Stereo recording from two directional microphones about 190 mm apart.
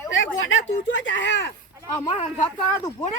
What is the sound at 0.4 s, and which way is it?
Speech, 80° left.